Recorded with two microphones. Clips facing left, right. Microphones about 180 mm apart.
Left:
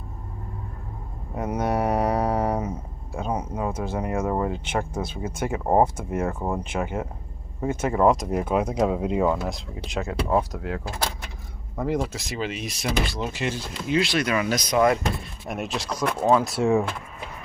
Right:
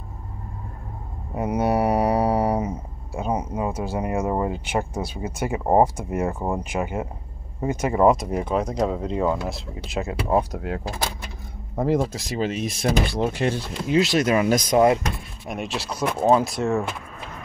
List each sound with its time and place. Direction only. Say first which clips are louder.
1.3 s speech: right 3 dB; 10° right (ahead or behind)
11.7 s speech: right 4 dB; 35° right (ahead or behind)
12.7 s speech: right 3 dB; 55° right (ahead or behind)
13.8 s speech: right 4 dB; 40° right (ahead or behind)
14.8 s speech: right 1 dB; 20° right (ahead or behind)
15.4 s speech: right 1 dB; centre (ahead or behind)
16.4 s speech: left 2 dB; 10° left (ahead or behind)